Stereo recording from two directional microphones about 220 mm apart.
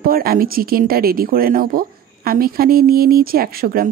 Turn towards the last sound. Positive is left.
turn(degrees=-40)  # may be behind; listen again after turning